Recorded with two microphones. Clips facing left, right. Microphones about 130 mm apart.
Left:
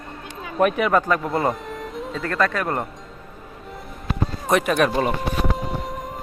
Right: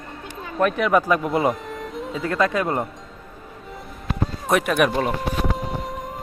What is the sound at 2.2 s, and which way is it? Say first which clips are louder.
Speech: right 2 dB; 15° right (ahead or behind).